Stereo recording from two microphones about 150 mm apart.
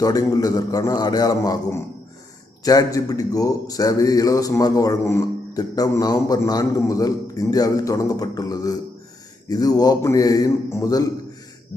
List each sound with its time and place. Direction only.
0.0 s speech: 25° left (ahead or behind)